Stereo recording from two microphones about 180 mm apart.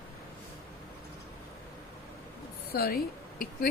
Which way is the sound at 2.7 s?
55° left (ahead or behind).